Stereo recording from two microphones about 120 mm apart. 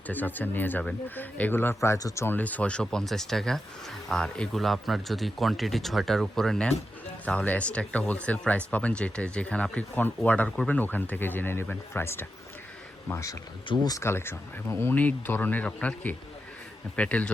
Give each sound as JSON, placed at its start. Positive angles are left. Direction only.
{"t": 0.1, "sound": "speech", "side_deg": 15}
{"t": 14.0, "sound": "speech", "side_deg": 20}